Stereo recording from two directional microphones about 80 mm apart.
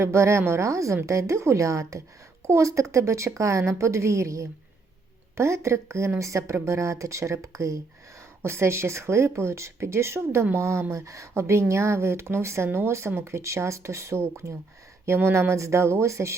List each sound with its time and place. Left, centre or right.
0.0 s speech: right